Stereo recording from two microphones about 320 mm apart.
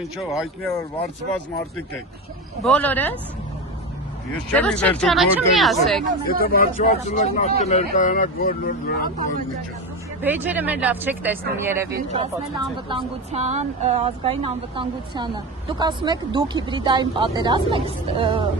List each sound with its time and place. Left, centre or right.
0.2 s speech: centre
2.6 s speech: centre
4.4 s speech: centre
6.4 s speech: left
10.2 s speech: centre